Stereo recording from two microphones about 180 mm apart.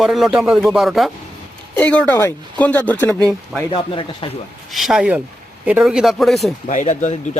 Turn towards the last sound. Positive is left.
turn(degrees=40)  # may be behind; listen again after turning